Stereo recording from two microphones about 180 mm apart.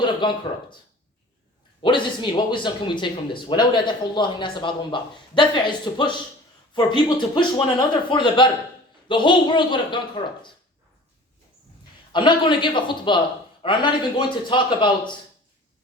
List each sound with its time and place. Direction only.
0.0 s speech: 25° left (ahead or behind)
1.8 s speech: 25° left (ahead or behind)
12.1 s speech: 25° left (ahead or behind)